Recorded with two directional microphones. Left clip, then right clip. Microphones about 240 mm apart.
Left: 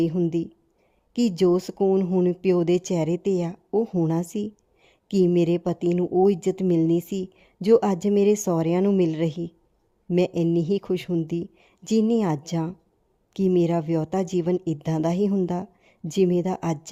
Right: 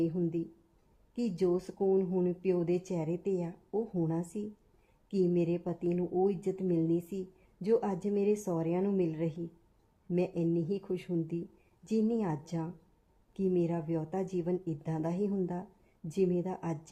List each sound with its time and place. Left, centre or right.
0.0 s speech: left